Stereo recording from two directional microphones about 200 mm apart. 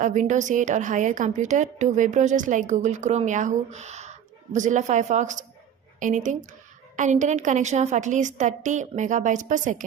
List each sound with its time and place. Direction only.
0.0 s a woman's voice: 40° right (ahead or behind)